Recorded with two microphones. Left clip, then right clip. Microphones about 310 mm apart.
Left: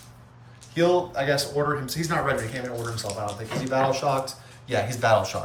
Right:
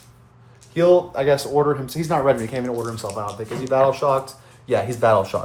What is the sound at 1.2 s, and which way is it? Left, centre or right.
Speech, centre.